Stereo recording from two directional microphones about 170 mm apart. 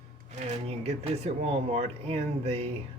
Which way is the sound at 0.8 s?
35° right (ahead or behind).